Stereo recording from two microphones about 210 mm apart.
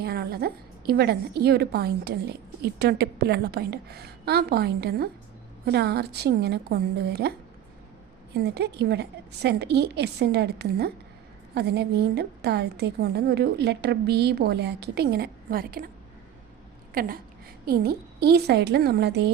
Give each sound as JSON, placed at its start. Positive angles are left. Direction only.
{"t": 0.0, "sound": "a woman's voice", "side_deg": -50}
{"t": 16.9, "sound": "a sound", "side_deg": -45}
{"t": 17.7, "sound": "a woman's voice", "side_deg": -50}